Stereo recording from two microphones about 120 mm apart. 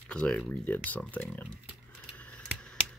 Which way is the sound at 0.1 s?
10° left (ahead or behind).